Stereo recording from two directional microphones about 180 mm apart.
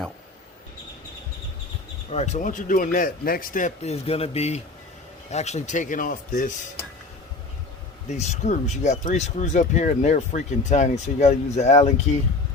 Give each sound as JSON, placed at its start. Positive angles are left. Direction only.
{"t": 2.0, "sound": "speech", "side_deg": 40}
{"t": 8.0, "sound": "speech", "side_deg": 40}